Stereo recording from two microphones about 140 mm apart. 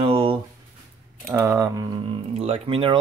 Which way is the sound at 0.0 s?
40° right (ahead or behind).